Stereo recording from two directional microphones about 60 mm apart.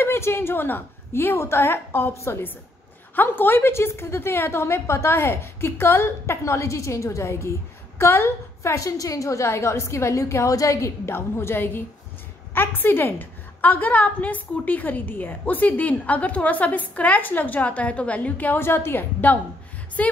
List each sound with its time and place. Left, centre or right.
0.0 s a woman's voice: left
8.7 s a woman's voice: left
11.1 s a woman's voice: left
18.6 s a woman's voice: left